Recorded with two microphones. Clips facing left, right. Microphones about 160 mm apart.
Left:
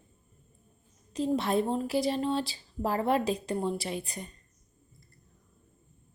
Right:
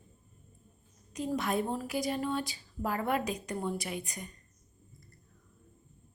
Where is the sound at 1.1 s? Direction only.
30° left (ahead or behind).